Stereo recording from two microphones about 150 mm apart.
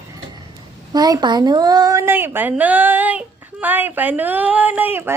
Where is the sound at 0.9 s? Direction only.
25° right (ahead or behind).